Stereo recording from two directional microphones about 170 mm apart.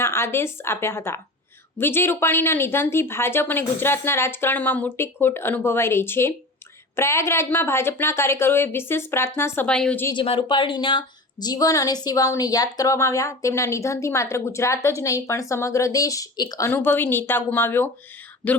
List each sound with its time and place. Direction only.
0.0 s a woman's voice: 15° left (ahead or behind)
10.1 s a woman's voice: 30° left (ahead or behind); by 18.6 s 10° left (ahead or behind)